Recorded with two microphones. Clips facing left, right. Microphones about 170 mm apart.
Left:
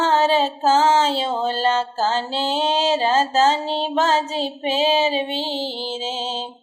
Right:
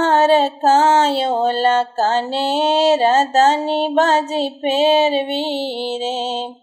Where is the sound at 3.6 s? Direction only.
60° right (ahead or behind).